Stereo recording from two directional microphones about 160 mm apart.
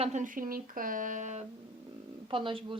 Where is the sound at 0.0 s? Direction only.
50° right (ahead or behind).